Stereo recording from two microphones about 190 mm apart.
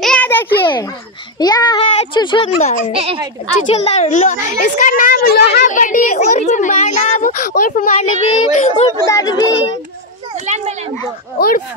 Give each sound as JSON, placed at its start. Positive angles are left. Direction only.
{"t": 0.0, "sound": "a sound", "side_deg": 5}
{"t": 1.4, "sound": "a child's voice", "side_deg": 20}
{"t": 3.7, "sound": "a woman's voice", "side_deg": 35}
{"t": 5.7, "sound": "a child's voice", "side_deg": 40}
{"t": 8.9, "sound": "a child's voice", "side_deg": 15}
{"t": 10.3, "sound": "a child's voice", "side_deg": -40}
{"t": 11.3, "sound": "a woman's voice", "side_deg": 50}